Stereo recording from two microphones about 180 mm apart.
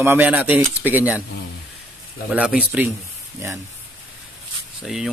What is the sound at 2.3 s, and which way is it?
Speech, 5° right (ahead or behind).